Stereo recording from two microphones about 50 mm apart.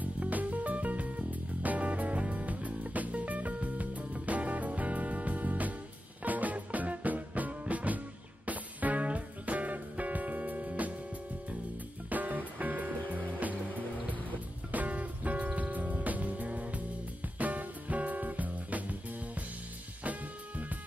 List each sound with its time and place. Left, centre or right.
0.0 s music: right
12.1 s music: right